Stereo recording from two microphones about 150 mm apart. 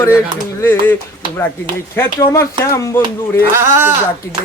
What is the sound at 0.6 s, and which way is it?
Speech, 15° left (ahead or behind).